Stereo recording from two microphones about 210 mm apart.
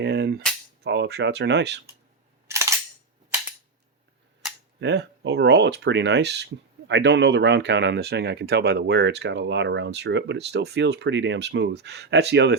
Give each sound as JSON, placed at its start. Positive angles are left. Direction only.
{"t": 0.0, "sound": "cap gun", "side_deg": -55}
{"t": 0.9, "sound": "speech", "side_deg": -55}
{"t": 2.5, "sound": "cap gun", "side_deg": -15}
{"t": 4.8, "sound": "speech", "side_deg": -55}